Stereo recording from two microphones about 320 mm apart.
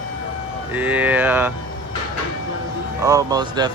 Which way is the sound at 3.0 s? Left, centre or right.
Centre.